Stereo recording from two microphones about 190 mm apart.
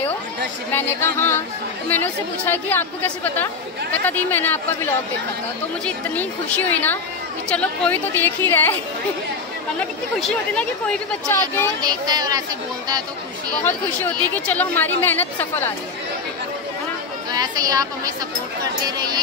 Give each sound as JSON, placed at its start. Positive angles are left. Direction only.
{"t": 0.7, "sound": "a woman's voice", "side_deg": 10}
{"t": 5.9, "sound": "a woman's voice", "side_deg": 10}
{"t": 10.2, "sound": "a woman's voice", "side_deg": 5}
{"t": 11.8, "sound": "speech", "side_deg": -20}
{"t": 13.7, "sound": "a woman's voice", "side_deg": 10}
{"t": 17.3, "sound": "a woman's voice", "side_deg": -20}